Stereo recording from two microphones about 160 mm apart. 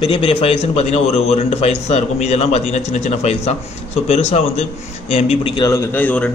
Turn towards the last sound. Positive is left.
turn(degrees=10)  # may be behind; listen again after turning